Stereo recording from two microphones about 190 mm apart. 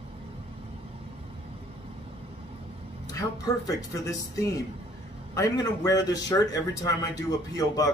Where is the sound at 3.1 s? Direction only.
20° left (ahead or behind).